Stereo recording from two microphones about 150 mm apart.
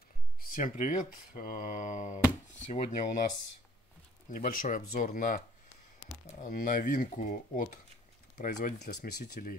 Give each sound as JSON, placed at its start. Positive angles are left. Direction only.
{"t": 0.4, "sound": "speech", "side_deg": 70}
{"t": 4.3, "sound": "speech", "side_deg": 65}
{"t": 6.4, "sound": "speech", "side_deg": 65}
{"t": 9.2, "sound": "speech", "side_deg": 65}